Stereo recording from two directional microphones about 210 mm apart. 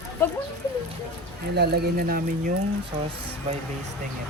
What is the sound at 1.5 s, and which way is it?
Speech, 50° right (ahead or behind).